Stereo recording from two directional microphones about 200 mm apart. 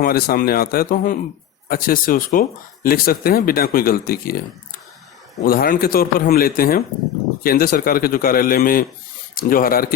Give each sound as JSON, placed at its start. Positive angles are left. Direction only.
{"t": 0.0, "sound": "speech", "side_deg": 50}
{"t": 5.5, "sound": "speech", "side_deg": 45}